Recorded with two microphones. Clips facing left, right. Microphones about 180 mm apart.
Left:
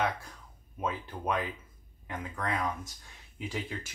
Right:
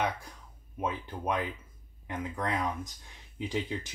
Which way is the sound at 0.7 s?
15° right (ahead or behind).